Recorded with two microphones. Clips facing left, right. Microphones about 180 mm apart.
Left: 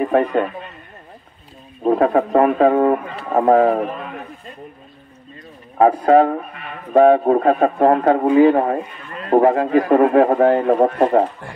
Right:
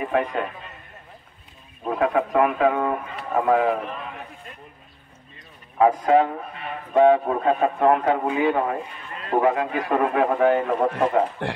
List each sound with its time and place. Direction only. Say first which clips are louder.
0.0 s a man's voice: left 7 dB; 40° left (ahead or behind)
1.8 s a man's voice: left 7 dB; 40° left (ahead or behind)
5.8 s a man's voice: left 5 dB; 35° left (ahead or behind)